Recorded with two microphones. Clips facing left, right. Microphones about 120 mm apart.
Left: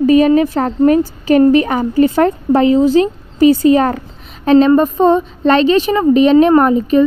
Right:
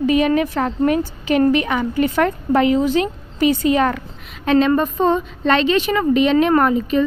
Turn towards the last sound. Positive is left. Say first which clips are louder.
# left 6 dB
turn(degrees=35)  # may be behind; listen again after turning